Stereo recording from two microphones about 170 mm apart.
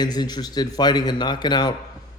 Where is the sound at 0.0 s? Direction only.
25° left (ahead or behind).